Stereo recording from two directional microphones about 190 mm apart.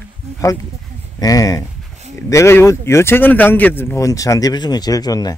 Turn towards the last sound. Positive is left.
turn(degrees=20)  # may be behind; listen again after turning